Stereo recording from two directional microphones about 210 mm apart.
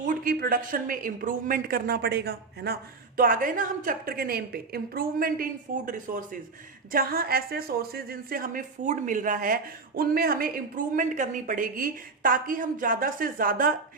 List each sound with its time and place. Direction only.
0.0 s a woman's voice: 40° right (ahead or behind)